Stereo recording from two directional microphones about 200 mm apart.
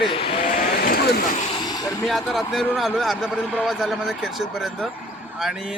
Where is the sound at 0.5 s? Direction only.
50° left (ahead or behind).